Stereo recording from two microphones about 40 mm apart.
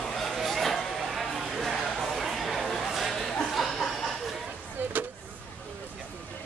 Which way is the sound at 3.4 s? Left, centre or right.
Centre.